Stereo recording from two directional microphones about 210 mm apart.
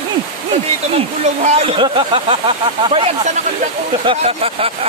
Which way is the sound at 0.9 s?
30° right (ahead or behind).